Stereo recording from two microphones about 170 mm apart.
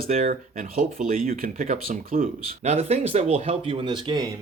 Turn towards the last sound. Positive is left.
turn(degrees=-25)  # may be behind; listen again after turning